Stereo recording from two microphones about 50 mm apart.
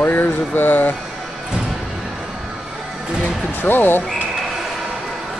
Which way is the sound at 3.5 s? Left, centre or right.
Left.